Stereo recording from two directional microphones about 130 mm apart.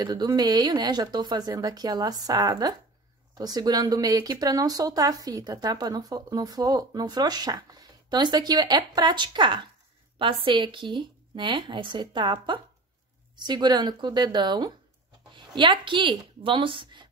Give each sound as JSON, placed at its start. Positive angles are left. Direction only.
{"t": 0.0, "sound": "a woman's voice", "side_deg": -30}